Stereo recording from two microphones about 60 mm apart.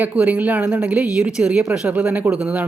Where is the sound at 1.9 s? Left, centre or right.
Right.